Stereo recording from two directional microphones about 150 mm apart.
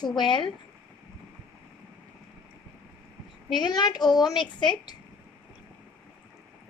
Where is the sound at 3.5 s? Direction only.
30° left (ahead or behind).